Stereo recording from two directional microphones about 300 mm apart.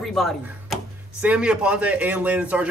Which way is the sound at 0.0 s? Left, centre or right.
Centre.